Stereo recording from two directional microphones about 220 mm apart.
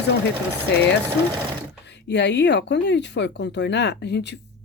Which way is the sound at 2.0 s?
50° left (ahead or behind).